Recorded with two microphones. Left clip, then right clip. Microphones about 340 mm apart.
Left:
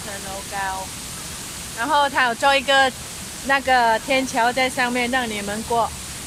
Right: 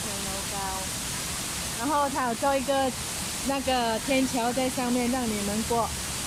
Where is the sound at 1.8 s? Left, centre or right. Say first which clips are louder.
Left 8 dB; left.